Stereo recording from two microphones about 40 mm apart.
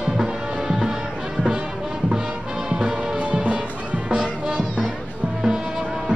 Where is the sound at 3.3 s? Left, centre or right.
Right.